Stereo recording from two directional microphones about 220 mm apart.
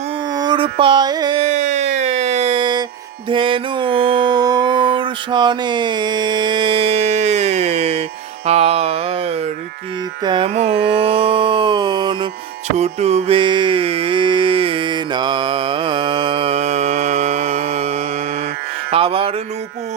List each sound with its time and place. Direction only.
0.3 s music: 20° right (ahead or behind)
3.2 s mantra: 25° right (ahead or behind)
8.4 s a sound: 30° right (ahead or behind)
10.2 s carnatic music: 25° right (ahead or behind)
11.0 s music: 25° right (ahead or behind)
18.9 s mantra: 25° right (ahead or behind)